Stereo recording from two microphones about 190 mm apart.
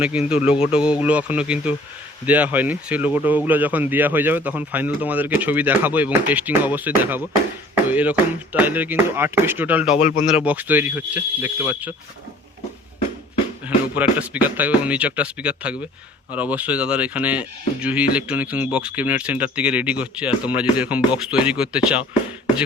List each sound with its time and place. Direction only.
0.3 s speech: 5° right (ahead or behind)
7.9 s a sound: 10° right (ahead or behind)
8.5 s speech: 10° right (ahead or behind)
10.0 s speech: 40° left (ahead or behind)
10.3 s speech: 10° right (ahead or behind)
13.7 s speech: 10° right (ahead or behind)